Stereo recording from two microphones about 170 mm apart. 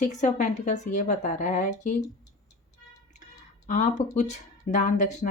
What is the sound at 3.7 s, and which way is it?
Speech, 45° left (ahead or behind).